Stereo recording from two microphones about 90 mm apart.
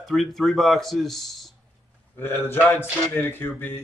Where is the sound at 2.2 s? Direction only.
25° left (ahead or behind).